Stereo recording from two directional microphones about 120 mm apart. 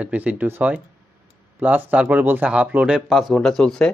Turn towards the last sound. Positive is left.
turn(degrees=5)  # may be behind; listen again after turning